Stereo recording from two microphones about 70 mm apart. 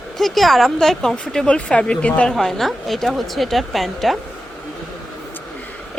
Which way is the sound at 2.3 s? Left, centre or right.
Centre.